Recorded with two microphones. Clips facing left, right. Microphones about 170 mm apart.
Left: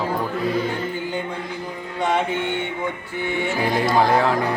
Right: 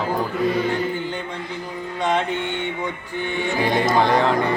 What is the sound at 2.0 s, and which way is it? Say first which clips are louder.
Music: left 1 dB; 10° left (ahead or behind).